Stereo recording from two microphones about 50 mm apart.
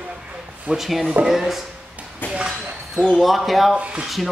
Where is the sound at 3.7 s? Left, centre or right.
Right.